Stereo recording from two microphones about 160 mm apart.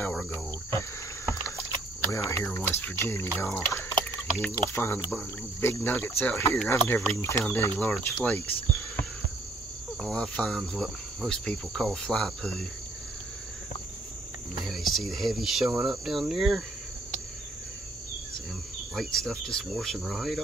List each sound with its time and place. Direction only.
0.0 s cricket: 10° left (ahead or behind)
0.7 s insect: 20° left (ahead or behind)
2.3 s speech: 15° left (ahead or behind)
10.0 s cricket: 5° left (ahead or behind)
14.6 s speech: centre (ahead or behind)
15.8 s cricket: centre (ahead or behind)
18.9 s cricket: 5° left (ahead or behind)